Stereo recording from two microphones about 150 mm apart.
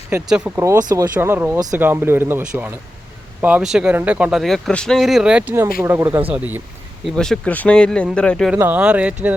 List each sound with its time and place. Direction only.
0.3 s speech: 10° right (ahead or behind)
0.9 s speech: 25° right (ahead or behind)
1.2 s speech: 15° right (ahead or behind)
7.0 s speech: 5° left (ahead or behind)
8.5 s speech: 10° right (ahead or behind)